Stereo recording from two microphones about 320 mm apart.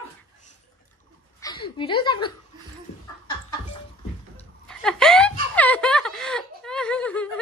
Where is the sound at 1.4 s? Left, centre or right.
Centre.